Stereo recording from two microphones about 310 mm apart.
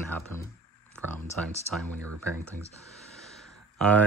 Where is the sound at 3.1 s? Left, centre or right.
Centre.